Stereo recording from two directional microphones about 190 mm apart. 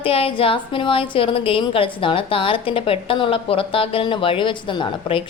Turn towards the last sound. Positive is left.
turn(degrees=25)  # may be behind; listen again after turning